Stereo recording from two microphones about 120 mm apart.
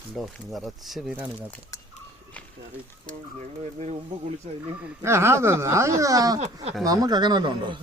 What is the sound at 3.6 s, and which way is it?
Speech, 70° right (ahead or behind).